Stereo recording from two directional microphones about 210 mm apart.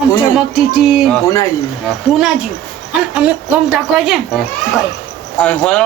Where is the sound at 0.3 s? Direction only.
5° right (ahead or behind).